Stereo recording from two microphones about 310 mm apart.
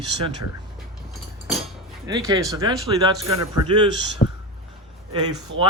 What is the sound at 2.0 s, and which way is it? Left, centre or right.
Speech, centre.